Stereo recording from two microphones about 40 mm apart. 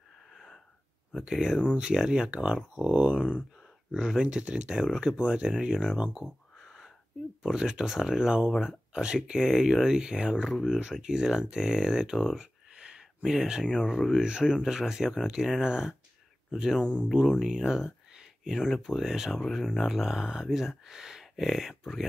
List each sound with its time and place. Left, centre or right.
0.3 s wheeze: centre
1.1 s speech: centre
6.6 s a sound: centre
7.4 s speech: centre
10.5 s speech: centre
10.9 s speech: centre
16.8 s speech: right
17.1 s speech: centre
19.6 s speech: centre